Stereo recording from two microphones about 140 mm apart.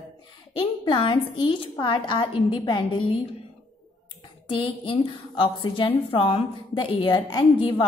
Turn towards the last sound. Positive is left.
turn(degrees=40)  # may be behind; listen again after turning